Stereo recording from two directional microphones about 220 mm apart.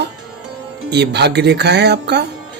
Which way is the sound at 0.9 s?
50° right (ahead or behind).